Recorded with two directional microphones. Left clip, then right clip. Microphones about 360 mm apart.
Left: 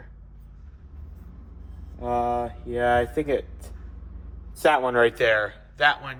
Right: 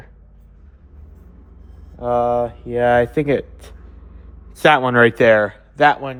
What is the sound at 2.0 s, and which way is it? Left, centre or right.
Speech, centre.